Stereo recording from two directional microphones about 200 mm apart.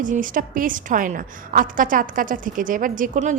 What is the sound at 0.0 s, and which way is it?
A woman's voice, 40° right (ahead or behind).